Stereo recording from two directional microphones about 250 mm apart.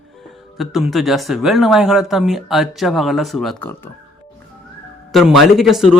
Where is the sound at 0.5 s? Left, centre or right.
Centre.